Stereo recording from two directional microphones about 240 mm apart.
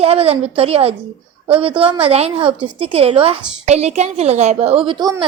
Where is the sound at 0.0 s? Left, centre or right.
Right.